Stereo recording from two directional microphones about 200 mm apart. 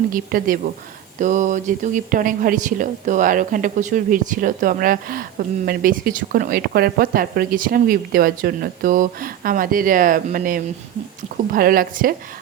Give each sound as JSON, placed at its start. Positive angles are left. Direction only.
{"t": 0.1, "sound": "speech", "side_deg": -45}